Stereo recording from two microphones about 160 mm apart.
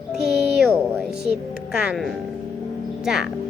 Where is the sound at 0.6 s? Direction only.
Centre (ahead or behind).